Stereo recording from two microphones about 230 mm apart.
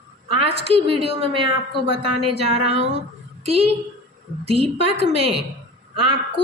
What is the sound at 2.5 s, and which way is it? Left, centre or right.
A woman's voice, right.